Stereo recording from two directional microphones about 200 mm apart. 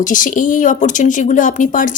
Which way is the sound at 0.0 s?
40° left (ahead or behind).